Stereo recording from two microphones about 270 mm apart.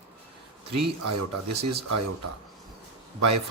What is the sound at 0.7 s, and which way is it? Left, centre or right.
Speech, right.